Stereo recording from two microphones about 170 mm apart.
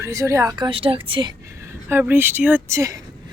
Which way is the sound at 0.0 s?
20° right (ahead or behind).